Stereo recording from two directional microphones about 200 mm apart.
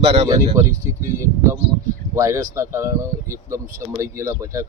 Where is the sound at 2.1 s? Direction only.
15° right (ahead or behind).